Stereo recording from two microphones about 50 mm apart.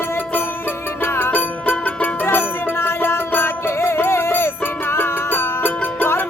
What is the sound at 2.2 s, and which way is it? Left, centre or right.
Music, left.